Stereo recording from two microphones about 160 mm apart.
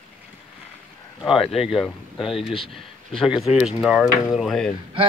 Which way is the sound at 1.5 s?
Centre (ahead or behind).